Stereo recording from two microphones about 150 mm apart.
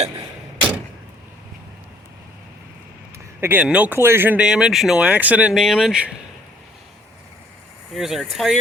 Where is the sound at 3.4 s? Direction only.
15° right (ahead or behind).